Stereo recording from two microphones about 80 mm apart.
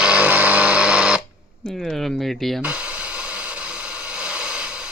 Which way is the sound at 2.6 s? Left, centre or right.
Centre.